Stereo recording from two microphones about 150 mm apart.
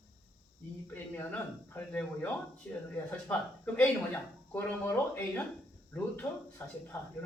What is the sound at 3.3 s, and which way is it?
Speech, 10° left (ahead or behind).